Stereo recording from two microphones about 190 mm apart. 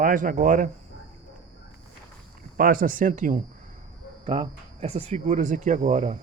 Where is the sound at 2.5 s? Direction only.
50° right (ahead or behind).